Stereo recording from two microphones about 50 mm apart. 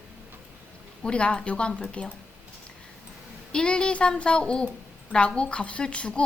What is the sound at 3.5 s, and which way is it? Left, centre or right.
Speech, centre.